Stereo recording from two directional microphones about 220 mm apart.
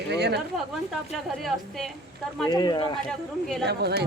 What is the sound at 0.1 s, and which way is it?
Speech, 50° right (ahead or behind).